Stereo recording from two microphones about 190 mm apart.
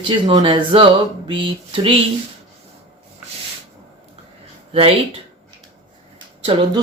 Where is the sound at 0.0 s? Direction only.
25° right (ahead or behind).